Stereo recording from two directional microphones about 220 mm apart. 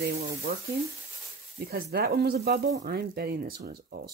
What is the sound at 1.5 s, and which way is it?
Speech, 40° right (ahead or behind).